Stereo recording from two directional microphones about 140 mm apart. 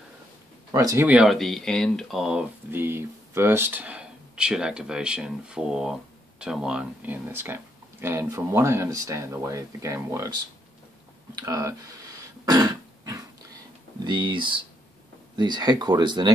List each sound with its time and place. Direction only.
0.7 s speech: 25° right (ahead or behind)
1.0 s speech: 5° right (ahead or behind); by 10.3 s 20° right (ahead or behind)
11.3 s throat clearing: 25° right (ahead or behind)
13.9 s speech: 35° right (ahead or behind)